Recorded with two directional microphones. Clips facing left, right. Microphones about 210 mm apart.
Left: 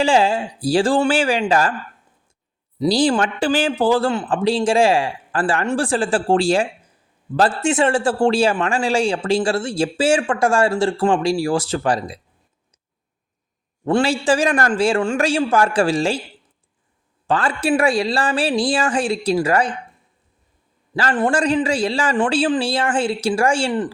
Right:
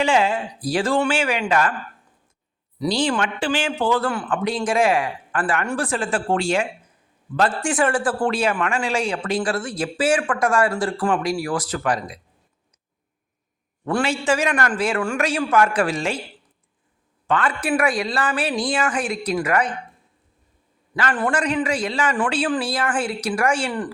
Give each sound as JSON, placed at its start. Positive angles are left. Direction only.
{"t": 0.0, "sound": "speech", "side_deg": 30}
{"t": 2.7, "sound": "speech", "side_deg": 30}
{"t": 13.8, "sound": "speech", "side_deg": 30}
{"t": 17.2, "sound": "speech", "side_deg": 30}
{"t": 20.9, "sound": "speech", "side_deg": 30}